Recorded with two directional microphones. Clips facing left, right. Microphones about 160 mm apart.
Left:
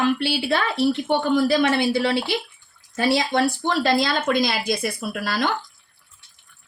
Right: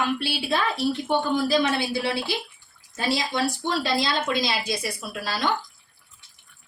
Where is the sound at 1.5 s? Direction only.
65° left (ahead or behind).